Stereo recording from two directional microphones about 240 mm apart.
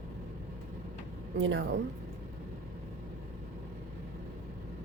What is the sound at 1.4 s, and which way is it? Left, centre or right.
Speech, right.